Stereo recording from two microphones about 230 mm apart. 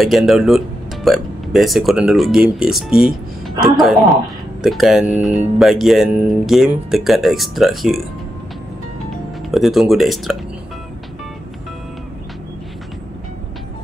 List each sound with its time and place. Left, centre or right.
0.0 s speech: centre
9.1 s speech: centre